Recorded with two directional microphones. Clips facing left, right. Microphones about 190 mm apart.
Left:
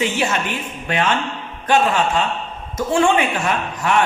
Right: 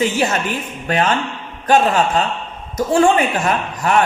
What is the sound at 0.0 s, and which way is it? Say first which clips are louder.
A woman's voice: right 3 dB; 40° right (ahead or behind).